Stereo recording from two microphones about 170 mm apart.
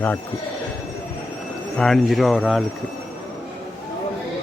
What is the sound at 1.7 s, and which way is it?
Speech, centre (ahead or behind).